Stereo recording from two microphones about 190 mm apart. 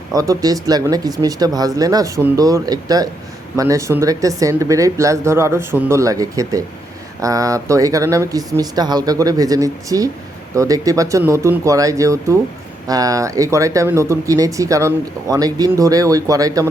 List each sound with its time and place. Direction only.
0.1 s speech: 20° right (ahead or behind)